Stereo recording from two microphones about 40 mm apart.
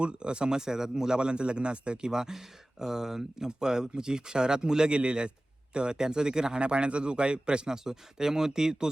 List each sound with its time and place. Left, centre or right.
0.0 s a man's voice: right
7.9 s speech: centre